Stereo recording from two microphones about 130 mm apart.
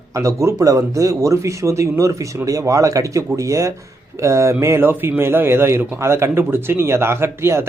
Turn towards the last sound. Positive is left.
turn(degrees=-20)  # may be behind; listen again after turning